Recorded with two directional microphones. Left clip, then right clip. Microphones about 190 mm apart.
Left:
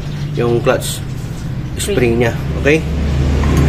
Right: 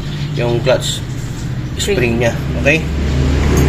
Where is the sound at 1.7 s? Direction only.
50° left (ahead or behind).